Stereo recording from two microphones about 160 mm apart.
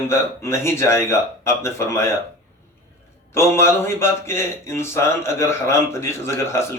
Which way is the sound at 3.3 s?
15° left (ahead or behind).